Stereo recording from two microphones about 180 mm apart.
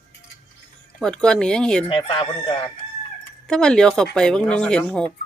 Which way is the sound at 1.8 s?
30° left (ahead or behind).